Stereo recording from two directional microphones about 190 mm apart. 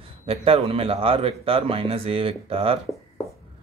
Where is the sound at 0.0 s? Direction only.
30° right (ahead or behind).